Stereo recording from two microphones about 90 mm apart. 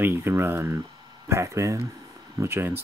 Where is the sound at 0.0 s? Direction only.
25° right (ahead or behind).